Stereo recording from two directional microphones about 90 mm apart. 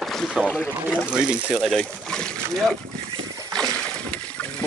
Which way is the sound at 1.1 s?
10° right (ahead or behind).